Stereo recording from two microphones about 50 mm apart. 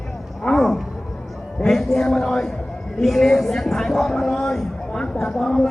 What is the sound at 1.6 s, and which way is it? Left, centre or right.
Speech, centre.